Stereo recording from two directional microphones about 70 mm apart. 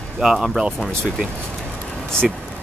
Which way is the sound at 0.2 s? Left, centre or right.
Centre.